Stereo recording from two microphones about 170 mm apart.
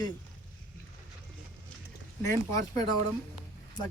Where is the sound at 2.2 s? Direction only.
20° left (ahead or behind).